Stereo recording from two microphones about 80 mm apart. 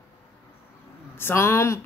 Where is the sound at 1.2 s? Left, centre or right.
Left.